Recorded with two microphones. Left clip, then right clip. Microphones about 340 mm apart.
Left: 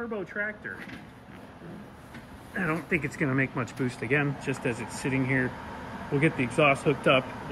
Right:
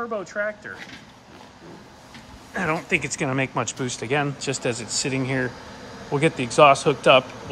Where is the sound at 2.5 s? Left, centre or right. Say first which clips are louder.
Right 6 dB; centre.